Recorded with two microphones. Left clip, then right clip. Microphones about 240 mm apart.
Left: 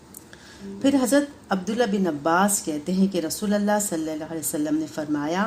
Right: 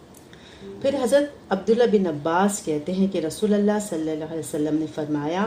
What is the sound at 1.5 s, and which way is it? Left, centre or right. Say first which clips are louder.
A woman's voice: right 5 dB; left.